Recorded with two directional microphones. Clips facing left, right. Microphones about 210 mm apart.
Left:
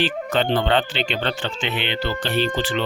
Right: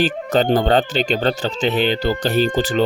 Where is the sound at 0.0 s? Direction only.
40° right (ahead or behind).